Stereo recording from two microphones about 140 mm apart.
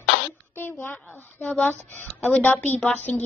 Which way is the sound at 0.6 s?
15° left (ahead or behind).